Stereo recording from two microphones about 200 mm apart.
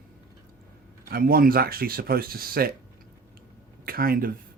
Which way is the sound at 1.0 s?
45° right (ahead or behind).